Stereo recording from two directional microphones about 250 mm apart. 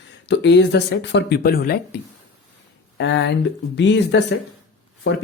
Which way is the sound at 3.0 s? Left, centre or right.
Left.